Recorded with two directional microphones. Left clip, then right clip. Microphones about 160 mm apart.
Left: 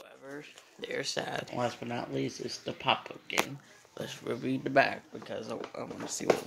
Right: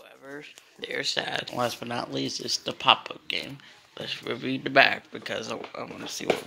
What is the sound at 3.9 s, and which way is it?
Speech, 15° left (ahead or behind).